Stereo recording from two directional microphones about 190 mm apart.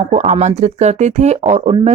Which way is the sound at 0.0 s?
35° right (ahead or behind).